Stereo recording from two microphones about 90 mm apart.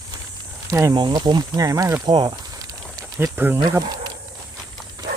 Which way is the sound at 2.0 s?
55° right (ahead or behind).